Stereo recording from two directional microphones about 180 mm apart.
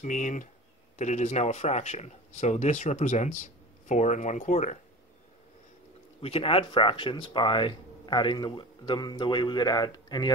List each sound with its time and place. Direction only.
0.0 s speech: 45° left (ahead or behind)
6.2 s speech: 30° left (ahead or behind)